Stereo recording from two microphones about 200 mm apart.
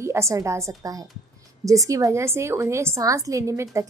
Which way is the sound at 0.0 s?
15° right (ahead or behind).